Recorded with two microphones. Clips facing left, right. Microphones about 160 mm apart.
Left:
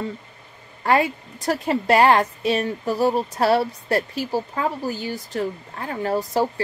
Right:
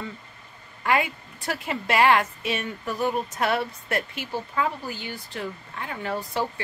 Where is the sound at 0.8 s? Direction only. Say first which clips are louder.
Left 5 dB; 35° left (ahead or behind).